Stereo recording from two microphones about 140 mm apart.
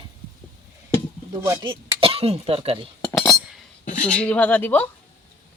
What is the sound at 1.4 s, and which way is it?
Speech, 25° right (ahead or behind).